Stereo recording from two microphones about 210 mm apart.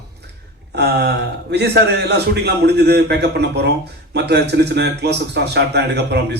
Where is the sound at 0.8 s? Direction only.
50° right (ahead or behind).